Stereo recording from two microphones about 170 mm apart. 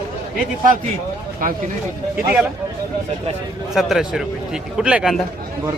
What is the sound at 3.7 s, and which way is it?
A man's voice, centre (ahead or behind).